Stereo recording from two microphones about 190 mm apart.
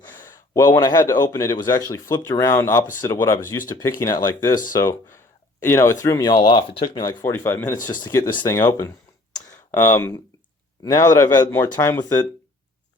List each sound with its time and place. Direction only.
0.1 s speech: 20° left (ahead or behind)
9.3 s a sound: 10° left (ahead or behind)
10.8 s speech: 15° left (ahead or behind)